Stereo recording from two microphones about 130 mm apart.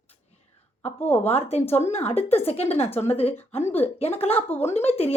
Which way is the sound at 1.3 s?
50° left (ahead or behind).